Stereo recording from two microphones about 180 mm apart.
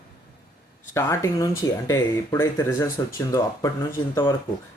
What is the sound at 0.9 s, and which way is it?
Speech, 15° left (ahead or behind).